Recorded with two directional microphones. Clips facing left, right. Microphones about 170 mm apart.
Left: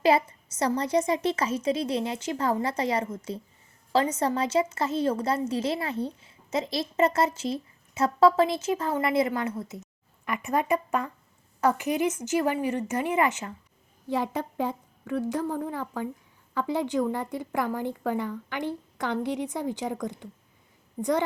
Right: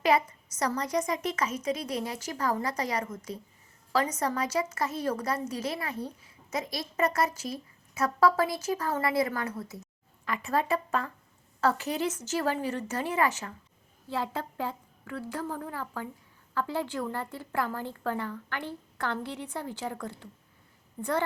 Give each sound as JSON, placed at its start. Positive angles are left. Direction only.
{"t": 0.0, "sound": "a woman's voice", "side_deg": 30}